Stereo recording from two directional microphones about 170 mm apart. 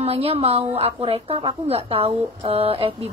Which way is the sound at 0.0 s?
35° right (ahead or behind).